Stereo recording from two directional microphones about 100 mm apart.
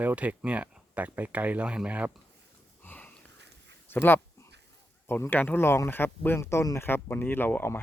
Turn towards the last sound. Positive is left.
turn(degrees=20)  # may be behind; listen again after turning